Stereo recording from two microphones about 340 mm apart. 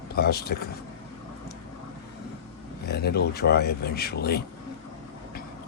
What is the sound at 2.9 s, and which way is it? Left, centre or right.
Speech, left.